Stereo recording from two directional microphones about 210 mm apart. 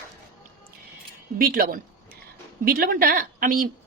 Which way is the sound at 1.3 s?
45° right (ahead or behind).